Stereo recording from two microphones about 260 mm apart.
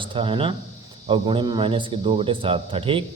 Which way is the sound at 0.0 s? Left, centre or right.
Right.